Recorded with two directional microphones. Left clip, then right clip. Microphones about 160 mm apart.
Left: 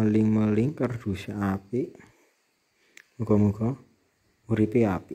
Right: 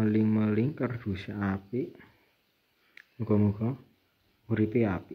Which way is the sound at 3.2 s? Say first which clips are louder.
Left 4 dB; 30° left (ahead or behind).